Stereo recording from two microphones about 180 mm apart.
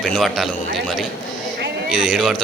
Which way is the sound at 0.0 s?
5° left (ahead or behind).